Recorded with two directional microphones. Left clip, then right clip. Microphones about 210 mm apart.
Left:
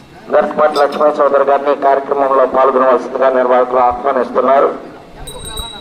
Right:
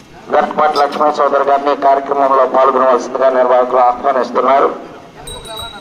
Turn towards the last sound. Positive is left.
turn(degrees=-45)  # may be behind; listen again after turning